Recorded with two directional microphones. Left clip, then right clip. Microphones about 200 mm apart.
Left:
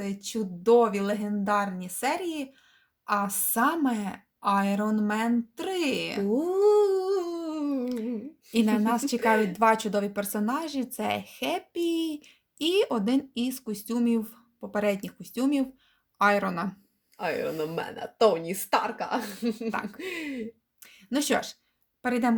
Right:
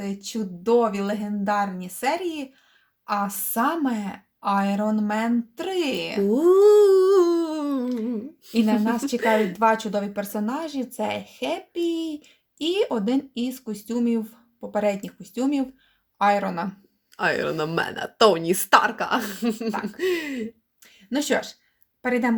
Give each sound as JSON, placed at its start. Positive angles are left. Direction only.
{"t": 0.0, "sound": "a woman's voice", "side_deg": 25}
{"t": 6.2, "sound": "humming", "side_deg": -30}
{"t": 8.5, "sound": "a woman's voice", "side_deg": 30}
{"t": 17.2, "sound": "speech", "side_deg": -40}
{"t": 20.8, "sound": "a sound", "side_deg": 30}
{"t": 22.0, "sound": "a woman's voice", "side_deg": 25}